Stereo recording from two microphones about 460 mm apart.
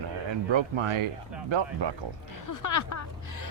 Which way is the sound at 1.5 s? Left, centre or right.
Right.